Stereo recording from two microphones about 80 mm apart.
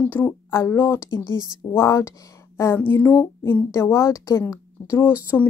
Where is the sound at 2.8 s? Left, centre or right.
Left.